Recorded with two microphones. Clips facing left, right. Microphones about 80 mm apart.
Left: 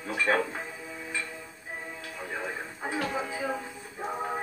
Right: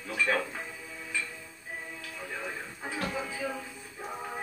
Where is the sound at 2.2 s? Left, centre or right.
Left.